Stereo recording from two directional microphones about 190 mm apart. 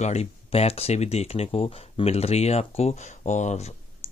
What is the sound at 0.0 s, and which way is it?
Speech, 35° left (ahead or behind).